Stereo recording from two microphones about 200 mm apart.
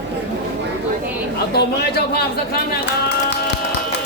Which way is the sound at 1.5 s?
55° left (ahead or behind).